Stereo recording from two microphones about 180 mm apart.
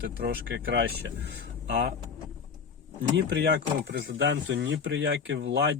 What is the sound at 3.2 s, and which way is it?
Speech, 75° right (ahead or behind).